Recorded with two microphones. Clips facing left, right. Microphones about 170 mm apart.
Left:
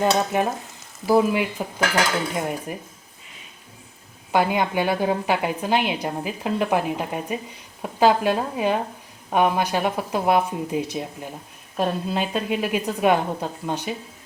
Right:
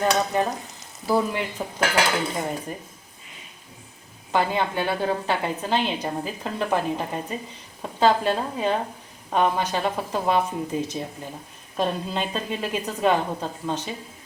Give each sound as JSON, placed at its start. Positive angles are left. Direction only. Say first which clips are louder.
{"t": 0.0, "sound": "frying", "louder": "left 2 dB", "side_deg": 20}
{"t": 1.0, "sound": "a woman's voice", "louder": "left 5 dB", "side_deg": 10}
{"t": 4.3, "sound": "a woman's voice", "louder": "left 2 dB", "side_deg": 10}